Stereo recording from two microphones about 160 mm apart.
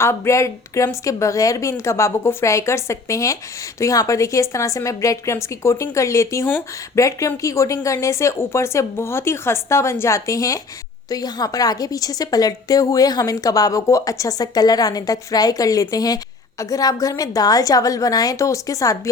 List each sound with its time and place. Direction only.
0.0 s a woman's voice: 15° left (ahead or behind)